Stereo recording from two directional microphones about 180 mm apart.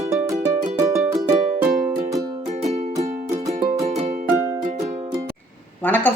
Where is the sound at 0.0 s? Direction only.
15° right (ahead or behind).